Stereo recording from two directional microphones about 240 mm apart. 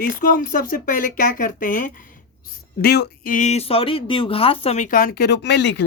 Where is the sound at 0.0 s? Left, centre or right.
Left.